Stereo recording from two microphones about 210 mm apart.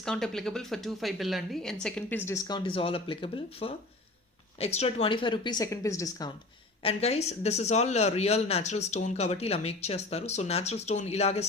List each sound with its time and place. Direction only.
0.0 s speech: centre (ahead or behind)
6.8 s speech: 30° left (ahead or behind)